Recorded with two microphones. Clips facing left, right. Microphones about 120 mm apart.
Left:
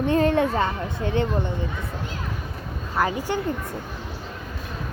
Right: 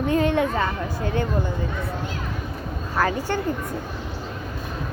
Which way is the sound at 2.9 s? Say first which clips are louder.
Right 1 dB; 15° left (ahead or behind).